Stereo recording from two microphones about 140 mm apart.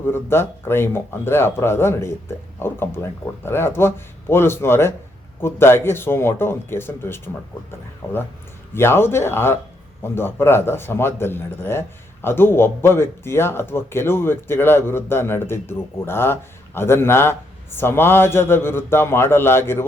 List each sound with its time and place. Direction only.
0.1 s speech: 15° left (ahead or behind)